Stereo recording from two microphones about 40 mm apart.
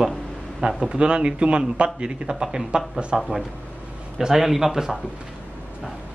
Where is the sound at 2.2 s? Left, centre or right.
Centre.